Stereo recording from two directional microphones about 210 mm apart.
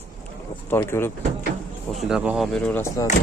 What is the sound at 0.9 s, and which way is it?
Speech, 10° left (ahead or behind).